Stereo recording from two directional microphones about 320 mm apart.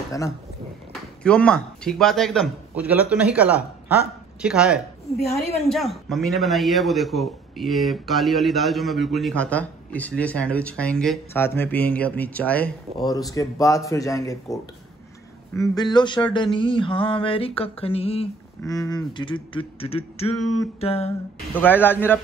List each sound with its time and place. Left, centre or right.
0.9 s a man's voice: centre
15.5 s mantra: centre
20.3 s a man's voice: centre
20.8 s a sound: centre
21.5 s a man's voice: centre